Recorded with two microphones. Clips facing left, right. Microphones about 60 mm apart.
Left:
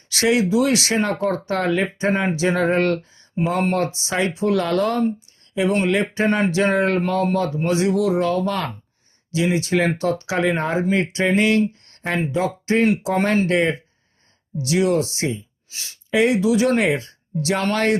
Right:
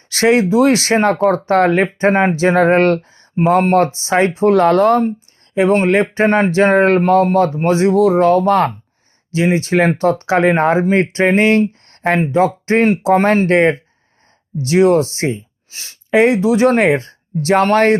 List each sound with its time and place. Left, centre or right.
0.1 s speech: right